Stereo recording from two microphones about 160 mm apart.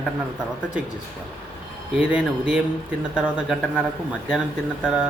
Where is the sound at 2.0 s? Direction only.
5° right (ahead or behind).